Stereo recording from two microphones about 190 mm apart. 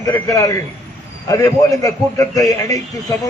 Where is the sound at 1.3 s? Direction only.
15° left (ahead or behind).